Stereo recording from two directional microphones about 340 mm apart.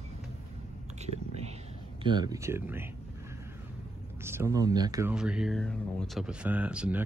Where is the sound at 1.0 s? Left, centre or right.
Centre.